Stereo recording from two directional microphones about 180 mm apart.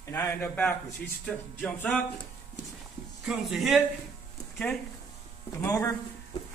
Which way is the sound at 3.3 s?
Centre (ahead or behind).